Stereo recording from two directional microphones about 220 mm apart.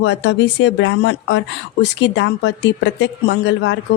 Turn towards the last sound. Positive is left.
turn(degrees=55)  # may be behind; listen again after turning